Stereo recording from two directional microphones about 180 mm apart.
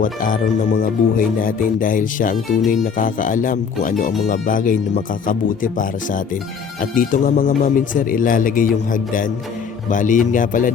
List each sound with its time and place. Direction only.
0.0 s speech: 50° left (ahead or behind)
6.9 s speech: 50° left (ahead or behind)